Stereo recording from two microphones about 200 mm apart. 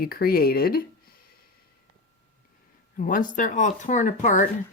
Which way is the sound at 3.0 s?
40° left (ahead or behind).